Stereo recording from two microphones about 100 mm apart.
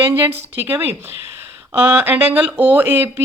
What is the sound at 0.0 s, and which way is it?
Speech, 20° right (ahead or behind).